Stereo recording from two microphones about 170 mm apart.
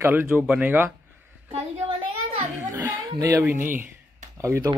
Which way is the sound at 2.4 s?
15° right (ahead or behind).